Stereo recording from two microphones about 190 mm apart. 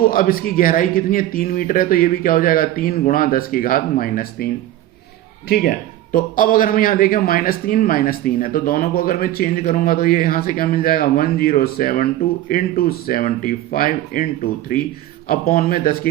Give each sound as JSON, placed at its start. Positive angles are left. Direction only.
{"t": 0.0, "sound": "a man's voice", "side_deg": 50}
{"t": 5.5, "sound": "a man's voice", "side_deg": 50}
{"t": 15.3, "sound": "a man's voice", "side_deg": 50}